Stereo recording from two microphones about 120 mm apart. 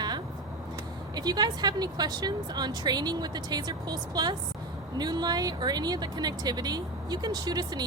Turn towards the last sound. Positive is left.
turn(degrees=-35)  # may be behind; listen again after turning